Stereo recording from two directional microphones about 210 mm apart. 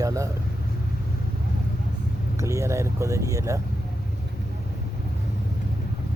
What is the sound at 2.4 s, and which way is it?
Speech, 15° right (ahead or behind).